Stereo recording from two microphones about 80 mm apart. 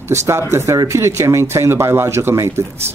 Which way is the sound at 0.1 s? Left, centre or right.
Right.